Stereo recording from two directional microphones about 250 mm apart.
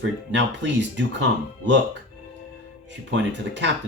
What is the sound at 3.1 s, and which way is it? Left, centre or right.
Speech, right.